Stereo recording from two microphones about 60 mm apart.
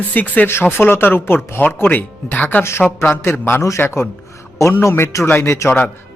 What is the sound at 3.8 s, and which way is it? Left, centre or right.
Speech, left.